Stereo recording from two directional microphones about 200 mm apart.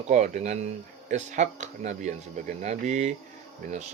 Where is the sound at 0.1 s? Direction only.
40° right (ahead or behind).